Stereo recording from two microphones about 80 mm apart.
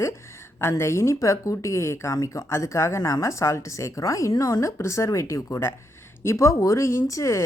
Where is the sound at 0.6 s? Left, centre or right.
Left.